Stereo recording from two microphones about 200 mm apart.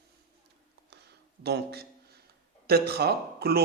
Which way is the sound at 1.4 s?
50° right (ahead or behind).